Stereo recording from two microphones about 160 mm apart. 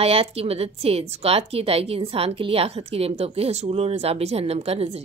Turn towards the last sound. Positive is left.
turn(degrees=-40)  # may be behind; listen again after turning